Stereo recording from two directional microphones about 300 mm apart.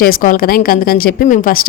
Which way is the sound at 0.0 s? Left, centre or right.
Left.